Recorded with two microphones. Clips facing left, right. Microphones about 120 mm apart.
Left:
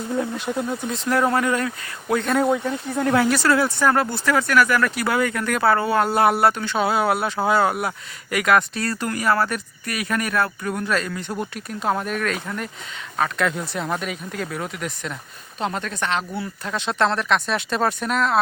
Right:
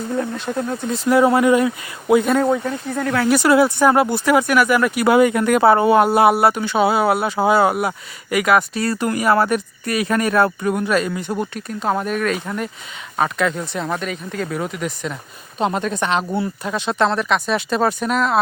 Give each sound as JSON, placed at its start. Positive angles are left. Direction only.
{"t": 0.2, "sound": "speech", "side_deg": 10}
{"t": 0.7, "sound": "speech", "side_deg": 0}
{"t": 2.4, "sound": "speech", "side_deg": 5}
{"t": 3.2, "sound": "speech", "side_deg": -15}
{"t": 15.5, "sound": "speech", "side_deg": -20}
{"t": 16.6, "sound": "speech", "side_deg": -5}